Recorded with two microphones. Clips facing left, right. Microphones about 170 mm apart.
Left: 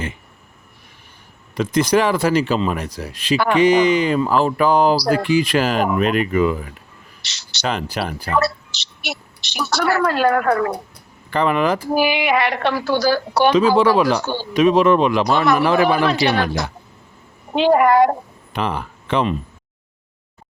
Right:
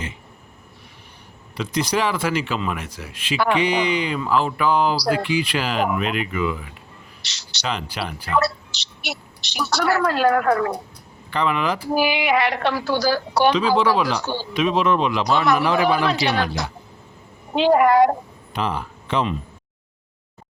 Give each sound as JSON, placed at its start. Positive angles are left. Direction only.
{"t": 1.5, "sound": "speech", "side_deg": 50}
{"t": 7.3, "sound": "a woman's voice", "side_deg": 60}
{"t": 11.3, "sound": "a woman's voice", "side_deg": 45}
{"t": 14.5, "sound": "a woman's voice", "side_deg": 45}